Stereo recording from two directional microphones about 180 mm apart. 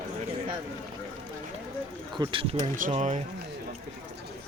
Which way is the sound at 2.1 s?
30° right (ahead or behind).